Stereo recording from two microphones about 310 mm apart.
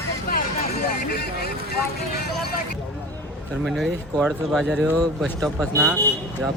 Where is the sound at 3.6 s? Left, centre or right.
Centre.